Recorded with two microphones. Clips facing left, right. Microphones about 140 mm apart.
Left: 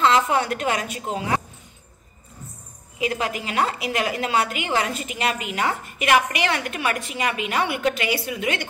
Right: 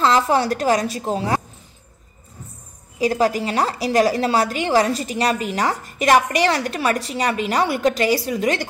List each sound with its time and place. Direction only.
0.0 s a woman's voice: 35° right (ahead or behind)
3.0 s a woman's voice: 35° right (ahead or behind)